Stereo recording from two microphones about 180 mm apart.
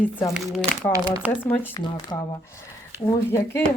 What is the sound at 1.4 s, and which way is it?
Speech, 10° left (ahead or behind).